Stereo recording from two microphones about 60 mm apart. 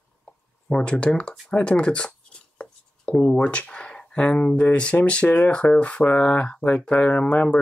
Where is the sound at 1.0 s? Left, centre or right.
Centre.